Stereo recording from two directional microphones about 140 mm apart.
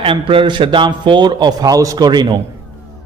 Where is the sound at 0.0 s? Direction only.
40° right (ahead or behind).